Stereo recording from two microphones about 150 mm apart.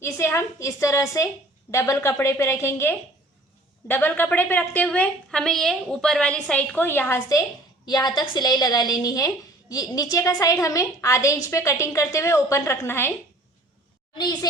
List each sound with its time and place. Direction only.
0.0 s a woman's voice: 15° left (ahead or behind)